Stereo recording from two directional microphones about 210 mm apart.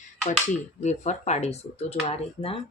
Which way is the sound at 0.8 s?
35° left (ahead or behind).